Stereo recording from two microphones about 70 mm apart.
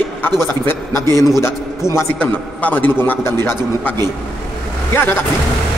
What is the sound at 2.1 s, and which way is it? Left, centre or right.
A man's voice, left.